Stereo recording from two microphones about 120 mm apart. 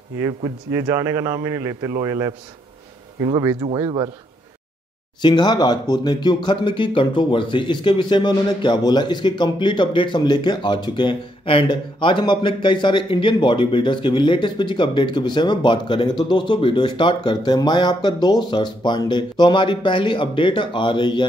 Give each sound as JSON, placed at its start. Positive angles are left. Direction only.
{"t": 0.2, "sound": "a man's voice", "side_deg": -30}
{"t": 3.6, "sound": "speech", "side_deg": -35}
{"t": 5.2, "sound": "speech", "side_deg": 35}